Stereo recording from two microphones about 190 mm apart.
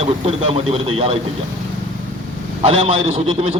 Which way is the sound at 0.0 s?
30° right (ahead or behind).